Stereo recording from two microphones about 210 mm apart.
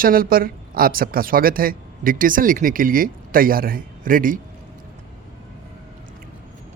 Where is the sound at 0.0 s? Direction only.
45° right (ahead or behind).